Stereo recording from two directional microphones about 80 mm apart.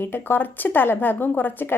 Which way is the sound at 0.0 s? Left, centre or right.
Left.